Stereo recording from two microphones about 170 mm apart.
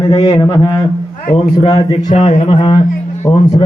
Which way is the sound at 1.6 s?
30° left (ahead or behind).